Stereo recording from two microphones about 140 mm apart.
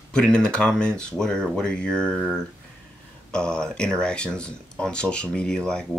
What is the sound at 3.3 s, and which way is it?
Speech, 5° left (ahead or behind).